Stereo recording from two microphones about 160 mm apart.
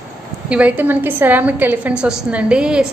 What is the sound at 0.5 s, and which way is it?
A woman's voice, 10° right (ahead or behind).